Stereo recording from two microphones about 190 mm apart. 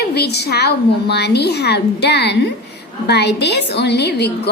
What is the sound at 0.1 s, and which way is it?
A woman's voice, 60° left (ahead or behind).